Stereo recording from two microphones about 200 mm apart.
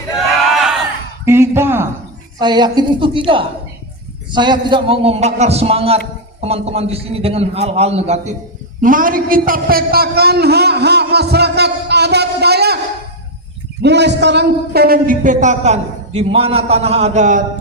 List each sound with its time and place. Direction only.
0.5 s crowd: centre (ahead or behind)
1.2 s a man's voice: 10° right (ahead or behind); by 12.8 s 55° right (ahead or behind)
13.8 s a man's voice: 60° right (ahead or behind); by 17.4 s 35° right (ahead or behind)